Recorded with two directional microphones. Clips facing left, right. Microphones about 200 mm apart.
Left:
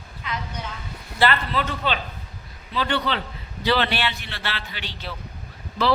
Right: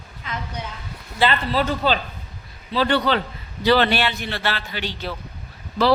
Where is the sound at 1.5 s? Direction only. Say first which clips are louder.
Right 5 dB; 35° right (ahead or behind).